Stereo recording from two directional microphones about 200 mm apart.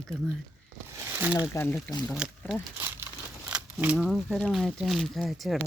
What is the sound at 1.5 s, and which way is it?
Speech, 15° left (ahead or behind).